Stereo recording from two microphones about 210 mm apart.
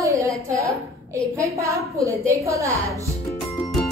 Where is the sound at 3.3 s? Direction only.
15° left (ahead or behind).